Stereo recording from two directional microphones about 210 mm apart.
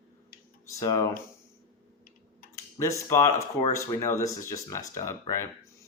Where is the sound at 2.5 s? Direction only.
15° left (ahead or behind).